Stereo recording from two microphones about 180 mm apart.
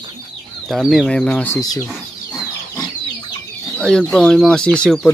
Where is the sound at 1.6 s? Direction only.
20° left (ahead or behind).